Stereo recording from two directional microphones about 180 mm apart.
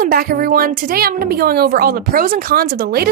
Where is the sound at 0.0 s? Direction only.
55° right (ahead or behind).